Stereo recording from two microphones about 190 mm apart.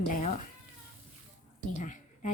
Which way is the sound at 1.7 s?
40° left (ahead or behind).